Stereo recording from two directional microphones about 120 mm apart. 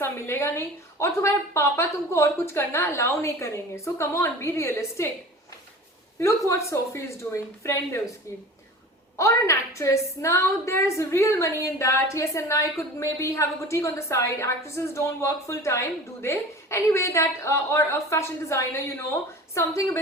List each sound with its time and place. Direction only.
0.0 s a woman's voice: 20° left (ahead or behind)
6.1 s a woman's voice: 25° left (ahead or behind)
9.1 s a woman's voice: 25° left (ahead or behind)